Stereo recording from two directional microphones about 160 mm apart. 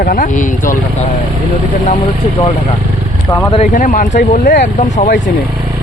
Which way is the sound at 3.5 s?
50° left (ahead or behind).